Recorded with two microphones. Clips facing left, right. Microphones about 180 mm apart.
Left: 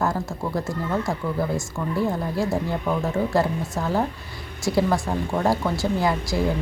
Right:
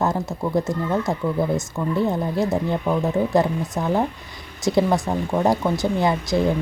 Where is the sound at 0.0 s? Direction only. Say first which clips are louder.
Right 2 dB; 20° right (ahead or behind).